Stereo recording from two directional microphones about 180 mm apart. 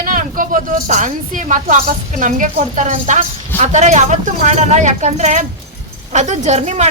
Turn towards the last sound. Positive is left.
turn(degrees=-35)  # may be behind; listen again after turning